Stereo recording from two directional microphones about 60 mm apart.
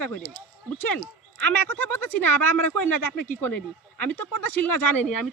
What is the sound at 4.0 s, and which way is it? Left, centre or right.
Speech, left.